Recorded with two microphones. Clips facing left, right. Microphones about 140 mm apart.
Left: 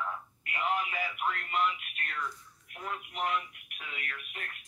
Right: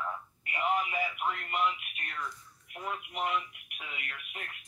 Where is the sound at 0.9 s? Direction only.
10° right (ahead or behind).